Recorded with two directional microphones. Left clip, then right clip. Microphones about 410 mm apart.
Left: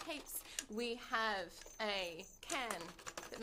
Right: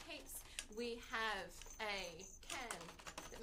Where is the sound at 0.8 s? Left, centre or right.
Left.